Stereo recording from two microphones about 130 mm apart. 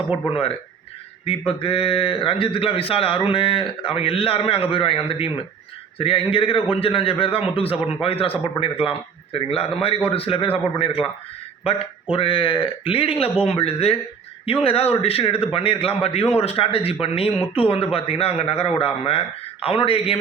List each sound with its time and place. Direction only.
0.3 s speech: 45° left (ahead or behind)
12.1 s speech: 45° left (ahead or behind)